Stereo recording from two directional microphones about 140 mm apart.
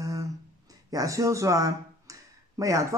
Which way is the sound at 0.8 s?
25° right (ahead or behind).